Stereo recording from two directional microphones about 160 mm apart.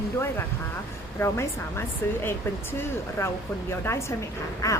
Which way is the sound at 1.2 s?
15° left (ahead or behind).